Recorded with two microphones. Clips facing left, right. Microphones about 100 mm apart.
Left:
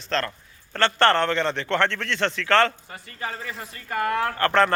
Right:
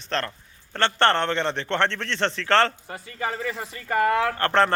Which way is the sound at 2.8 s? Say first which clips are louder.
Right 4 dB; 90° right.